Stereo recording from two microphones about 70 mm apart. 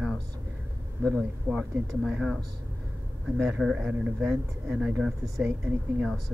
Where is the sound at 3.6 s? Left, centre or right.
Centre.